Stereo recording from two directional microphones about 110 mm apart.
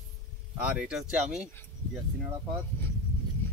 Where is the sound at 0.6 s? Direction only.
5° right (ahead or behind).